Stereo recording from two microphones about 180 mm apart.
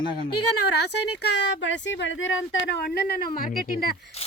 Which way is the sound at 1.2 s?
80° left.